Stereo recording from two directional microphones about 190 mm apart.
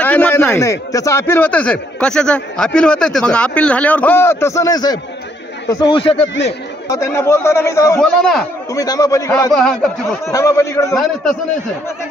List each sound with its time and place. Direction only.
0.0 s speech: 10° left (ahead or behind); by 6.2 s 30° left (ahead or behind)
6.2 s speech: 70° left (ahead or behind)
6.9 s speech: 15° left (ahead or behind)
8.0 s speech: 5° left (ahead or behind)
8.7 s speech: 20° left (ahead or behind)
9.5 s speech: centre (ahead or behind)
10.2 s speech: 15° left (ahead or behind)